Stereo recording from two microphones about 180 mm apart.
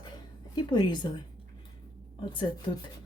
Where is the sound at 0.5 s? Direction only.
25° left (ahead or behind).